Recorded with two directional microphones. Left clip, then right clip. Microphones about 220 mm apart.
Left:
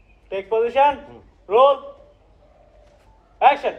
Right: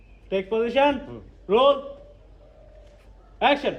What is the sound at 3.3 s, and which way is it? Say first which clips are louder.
Speech: left 5 dB; 40° right (ahead or behind).